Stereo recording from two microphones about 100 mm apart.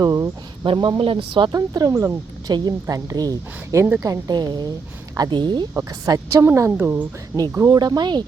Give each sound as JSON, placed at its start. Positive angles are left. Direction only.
{"t": 0.0, "sound": "speech", "side_deg": -30}
{"t": 0.6, "sound": "speech", "side_deg": -55}
{"t": 1.5, "sound": "speech", "side_deg": -40}
{"t": 6.1, "sound": "a woman's voice", "side_deg": -30}
{"t": 7.7, "sound": "speech", "side_deg": -45}